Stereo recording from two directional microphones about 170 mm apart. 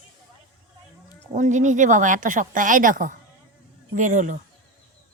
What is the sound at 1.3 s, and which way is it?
A woman's voice, 45° right (ahead or behind).